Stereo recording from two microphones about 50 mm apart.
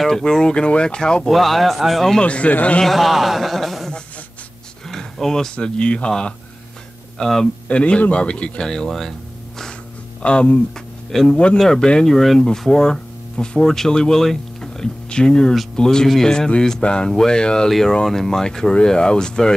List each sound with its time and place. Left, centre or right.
0.0 s speech: centre
1.3 s speech: centre
2.1 s speech: left
2.8 s speech: centre; by 6.3 s left
7.2 s speech: centre
7.6 s speech: left
8.6 s speech: centre
10.2 s speech: left
17.6 s speech: centre